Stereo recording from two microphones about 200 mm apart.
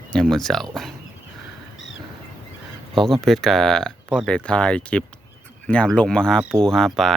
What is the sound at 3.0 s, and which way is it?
Speech, centre (ahead or behind).